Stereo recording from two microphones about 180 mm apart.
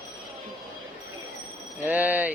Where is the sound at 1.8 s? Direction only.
10° right (ahead or behind).